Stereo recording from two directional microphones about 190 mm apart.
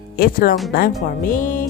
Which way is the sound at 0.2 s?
50° left (ahead or behind).